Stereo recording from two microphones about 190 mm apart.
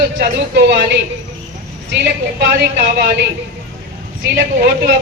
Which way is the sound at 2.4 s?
60° right (ahead or behind).